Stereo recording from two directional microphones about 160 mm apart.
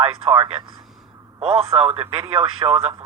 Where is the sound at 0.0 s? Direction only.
30° right (ahead or behind).